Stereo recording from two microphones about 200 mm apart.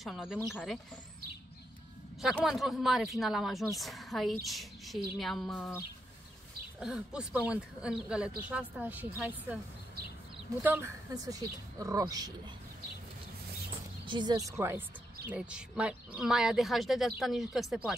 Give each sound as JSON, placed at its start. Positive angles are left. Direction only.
{"t": 0.0, "sound": "speech", "side_deg": 0}
{"t": 2.2, "sound": "speech", "side_deg": 0}
{"t": 6.8, "sound": "speech", "side_deg": -5}
{"t": 10.6, "sound": "speech", "side_deg": -10}
{"t": 14.0, "sound": "speech", "side_deg": -20}